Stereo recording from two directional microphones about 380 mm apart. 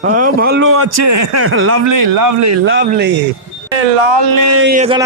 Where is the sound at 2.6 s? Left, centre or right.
Right.